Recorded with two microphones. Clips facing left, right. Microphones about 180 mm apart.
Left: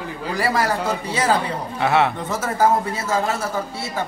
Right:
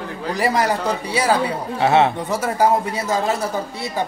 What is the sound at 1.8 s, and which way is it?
Speech, 25° right (ahead or behind).